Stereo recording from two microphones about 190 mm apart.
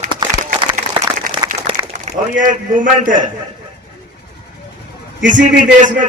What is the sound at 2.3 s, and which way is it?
Speech, 45° right (ahead or behind).